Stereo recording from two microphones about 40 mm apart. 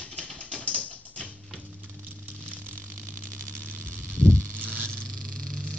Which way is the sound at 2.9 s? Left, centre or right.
Right.